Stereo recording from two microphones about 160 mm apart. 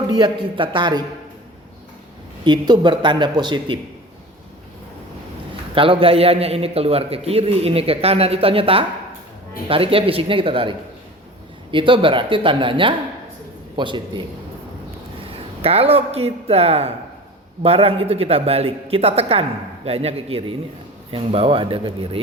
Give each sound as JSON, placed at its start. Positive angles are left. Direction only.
{"t": 0.1, "sound": "a man's voice", "side_deg": -30}
{"t": 2.4, "sound": "speech", "side_deg": -25}
{"t": 5.7, "sound": "a man's voice", "side_deg": -35}
{"t": 15.6, "sound": "a man's voice", "side_deg": -35}